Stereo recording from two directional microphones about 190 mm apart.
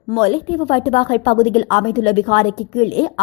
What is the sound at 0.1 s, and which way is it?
A woman's voice, 30° left (ahead or behind).